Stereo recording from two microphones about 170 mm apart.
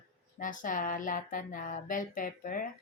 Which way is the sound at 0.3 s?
50° left (ahead or behind).